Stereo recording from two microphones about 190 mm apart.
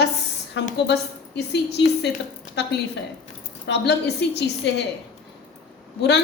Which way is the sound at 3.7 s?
65° left (ahead or behind).